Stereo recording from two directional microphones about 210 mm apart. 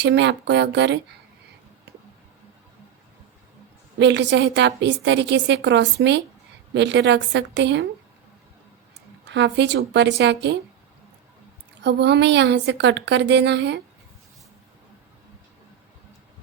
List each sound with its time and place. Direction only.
0.0 s a woman's voice: 55° right (ahead or behind)
3.9 s a woman's voice: 55° right (ahead or behind)
9.3 s a woman's voice: 55° right (ahead or behind)
11.8 s a woman's voice: 55° right (ahead or behind)